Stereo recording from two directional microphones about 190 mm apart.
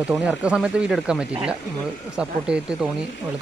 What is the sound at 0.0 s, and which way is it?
Speech, centre (ahead or behind).